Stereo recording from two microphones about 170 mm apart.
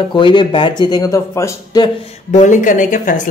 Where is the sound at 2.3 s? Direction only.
45° left (ahead or behind).